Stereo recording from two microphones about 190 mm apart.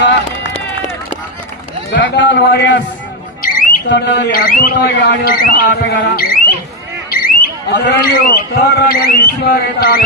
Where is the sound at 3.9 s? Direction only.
60° left (ahead or behind).